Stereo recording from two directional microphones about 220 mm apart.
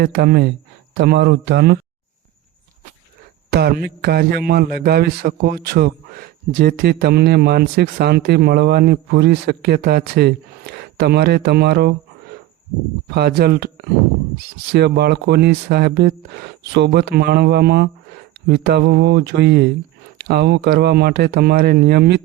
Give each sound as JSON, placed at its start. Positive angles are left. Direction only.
{"t": 0.0, "sound": "a man's voice", "side_deg": -50}
{"t": 3.5, "sound": "a man's voice", "side_deg": -45}
{"t": 13.1, "sound": "a man's voice", "side_deg": -45}